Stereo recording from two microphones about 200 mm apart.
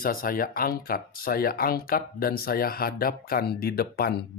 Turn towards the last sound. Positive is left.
turn(degrees=50)  # may be behind; listen again after turning